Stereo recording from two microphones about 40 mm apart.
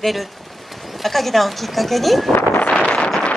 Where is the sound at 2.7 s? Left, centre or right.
Left.